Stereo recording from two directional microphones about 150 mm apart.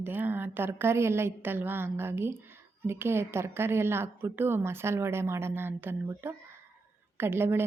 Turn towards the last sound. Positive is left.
turn(degrees=-15)  # may be behind; listen again after turning